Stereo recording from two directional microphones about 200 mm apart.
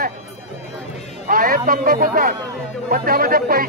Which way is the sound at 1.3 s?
45° right (ahead or behind).